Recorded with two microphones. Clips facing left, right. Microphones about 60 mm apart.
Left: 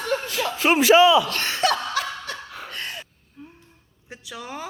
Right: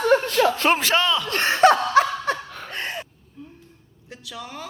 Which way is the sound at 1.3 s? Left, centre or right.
Right.